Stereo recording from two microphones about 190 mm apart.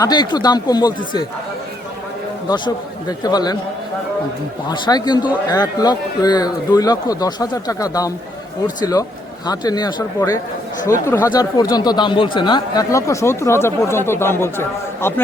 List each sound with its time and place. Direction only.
0.0 s a man's voice: 20° left (ahead or behind)
2.5 s a man's voice: 20° left (ahead or behind)
4.7 s a man's voice: 20° left (ahead or behind)